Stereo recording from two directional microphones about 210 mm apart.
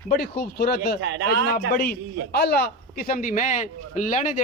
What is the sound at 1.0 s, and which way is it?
Speech, 60° right (ahead or behind).